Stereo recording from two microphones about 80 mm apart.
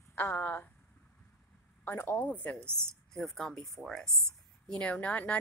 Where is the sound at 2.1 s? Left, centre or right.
Left.